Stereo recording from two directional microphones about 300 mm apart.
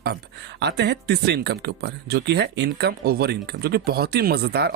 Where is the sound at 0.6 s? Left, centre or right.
Right.